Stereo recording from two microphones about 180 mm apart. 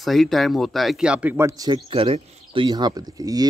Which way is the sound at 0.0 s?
Centre (ahead or behind).